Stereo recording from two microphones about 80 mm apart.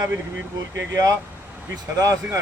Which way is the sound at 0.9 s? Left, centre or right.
Right.